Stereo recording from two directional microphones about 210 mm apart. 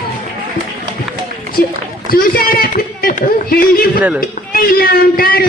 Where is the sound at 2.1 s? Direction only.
45° left (ahead or behind).